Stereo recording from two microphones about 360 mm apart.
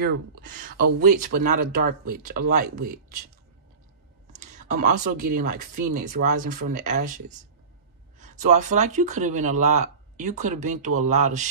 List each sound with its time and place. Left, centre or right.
0.0 s speech: right
4.3 s speech: centre